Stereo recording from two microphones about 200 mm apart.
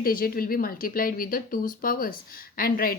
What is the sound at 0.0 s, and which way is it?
A woman's voice, 45° left (ahead or behind).